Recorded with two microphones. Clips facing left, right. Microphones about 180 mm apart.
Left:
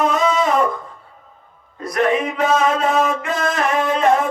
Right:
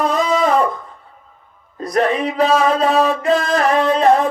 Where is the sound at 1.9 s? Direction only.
35° right (ahead or behind).